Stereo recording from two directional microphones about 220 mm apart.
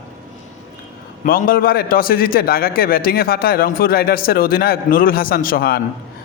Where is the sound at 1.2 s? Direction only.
40° left (ahead or behind).